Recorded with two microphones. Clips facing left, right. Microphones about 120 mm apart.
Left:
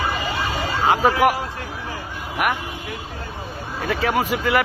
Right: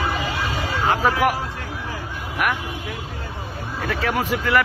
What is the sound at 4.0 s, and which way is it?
Speech, 15° left (ahead or behind).